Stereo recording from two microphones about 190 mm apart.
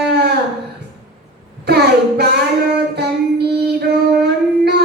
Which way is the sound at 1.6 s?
60° right (ahead or behind).